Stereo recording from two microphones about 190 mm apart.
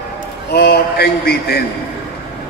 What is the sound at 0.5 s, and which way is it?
A man's voice, 55° left (ahead or behind).